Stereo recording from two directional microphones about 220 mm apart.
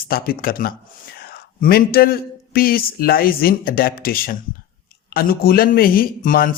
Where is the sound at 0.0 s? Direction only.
40° left (ahead or behind).